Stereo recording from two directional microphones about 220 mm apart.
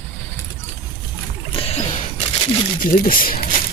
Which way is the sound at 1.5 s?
25° left (ahead or behind).